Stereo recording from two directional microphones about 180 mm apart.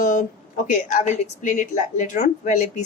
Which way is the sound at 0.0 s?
45° left (ahead or behind).